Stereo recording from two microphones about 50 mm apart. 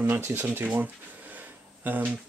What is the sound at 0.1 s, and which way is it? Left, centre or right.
Speech, right.